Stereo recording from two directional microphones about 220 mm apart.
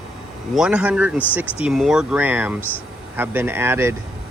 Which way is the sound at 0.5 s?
5° right (ahead or behind).